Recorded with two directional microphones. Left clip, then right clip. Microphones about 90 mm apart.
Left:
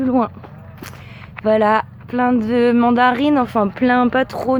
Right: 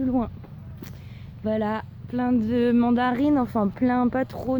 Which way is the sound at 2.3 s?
10° right (ahead or behind).